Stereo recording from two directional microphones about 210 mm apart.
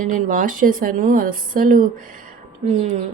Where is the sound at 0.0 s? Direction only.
40° right (ahead or behind).